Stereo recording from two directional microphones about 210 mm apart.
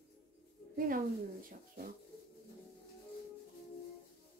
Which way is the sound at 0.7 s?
45° right (ahead or behind).